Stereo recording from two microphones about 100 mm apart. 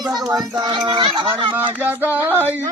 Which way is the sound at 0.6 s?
40° right (ahead or behind).